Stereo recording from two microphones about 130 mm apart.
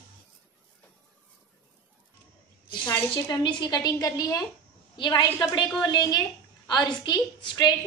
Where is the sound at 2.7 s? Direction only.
30° left (ahead or behind).